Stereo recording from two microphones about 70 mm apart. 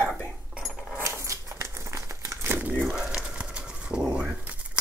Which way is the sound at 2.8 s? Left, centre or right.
Centre.